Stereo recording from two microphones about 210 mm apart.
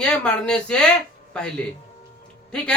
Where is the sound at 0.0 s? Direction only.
5° left (ahead or behind).